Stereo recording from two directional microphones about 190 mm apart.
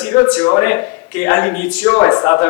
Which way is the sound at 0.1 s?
20° left (ahead or behind).